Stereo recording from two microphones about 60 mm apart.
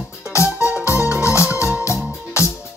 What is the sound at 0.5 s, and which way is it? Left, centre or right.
Music, right.